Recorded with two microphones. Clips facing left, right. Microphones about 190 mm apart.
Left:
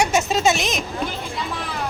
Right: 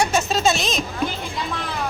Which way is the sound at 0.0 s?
20° left (ahead or behind).